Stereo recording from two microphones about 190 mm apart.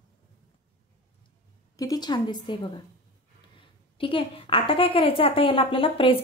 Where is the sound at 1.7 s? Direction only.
20° left (ahead or behind).